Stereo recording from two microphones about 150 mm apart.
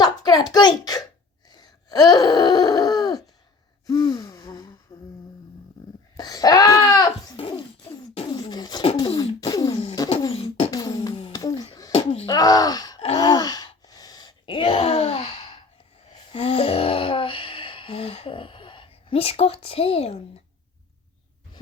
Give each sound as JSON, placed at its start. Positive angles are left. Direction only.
{"t": 0.0, "sound": "a sound", "side_deg": 25}
{"t": 0.5, "sound": "a child's voice", "side_deg": 25}
{"t": 1.5, "sound": "groan", "side_deg": 25}
{"t": 3.8, "sound": "gasp", "side_deg": 25}
{"t": 4.9, "sound": "humming", "side_deg": 35}
{"t": 6.1, "sound": "goat", "side_deg": 25}
{"t": 9.1, "sound": "a sound", "side_deg": 25}
{"t": 10.3, "sound": "beatboxing", "side_deg": 40}
{"t": 10.7, "sound": "a sound", "side_deg": 25}
{"t": 11.9, "sound": "wail", "side_deg": 45}
{"t": 12.3, "sound": "wail", "side_deg": 25}
{"t": 16.3, "sound": "a sound", "side_deg": 40}